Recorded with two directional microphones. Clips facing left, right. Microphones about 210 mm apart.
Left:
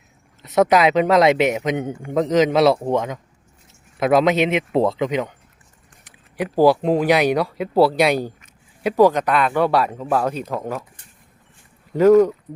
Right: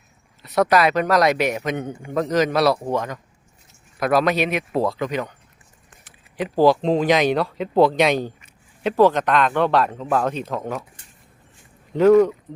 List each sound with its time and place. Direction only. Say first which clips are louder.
0.4 s speech: left 2 dB; 20° left (ahead or behind)
6.3 s speech: left 1 dB; 10° left (ahead or behind)
12.5 s speech: left 1 dB; 10° left (ahead or behind)